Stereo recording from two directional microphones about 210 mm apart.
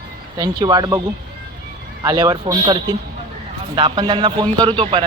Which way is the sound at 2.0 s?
20° right (ahead or behind).